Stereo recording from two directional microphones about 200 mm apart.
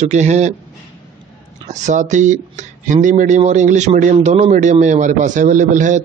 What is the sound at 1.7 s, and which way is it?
A man's voice, 35° right (ahead or behind).